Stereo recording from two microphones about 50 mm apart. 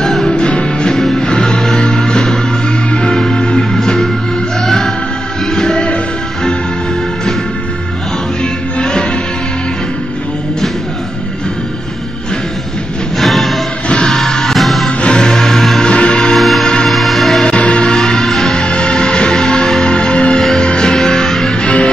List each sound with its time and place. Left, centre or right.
0.0 s music: centre
0.3 s music: left
0.9 s music: centre
13.2 s music: centre
13.8 s music: left
14.1 s music: centre
14.9 s music: left; by 15.8 s centre
15.8 s music: centre
16.3 s music: centre
16.6 s music: centre
16.9 s music: centre
17.5 s music: left
18.7 s music: centre
20.3 s music: centre